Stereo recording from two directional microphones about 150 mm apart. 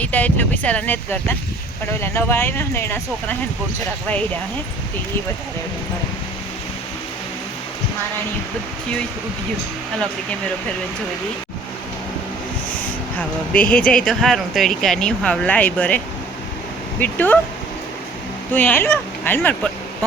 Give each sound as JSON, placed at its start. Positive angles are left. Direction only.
{"t": 0.0, "sound": "speech", "side_deg": 10}
{"t": 13.1, "sound": "speech", "side_deg": 10}
{"t": 17.0, "sound": "speech", "side_deg": 10}
{"t": 18.5, "sound": "speech", "side_deg": 15}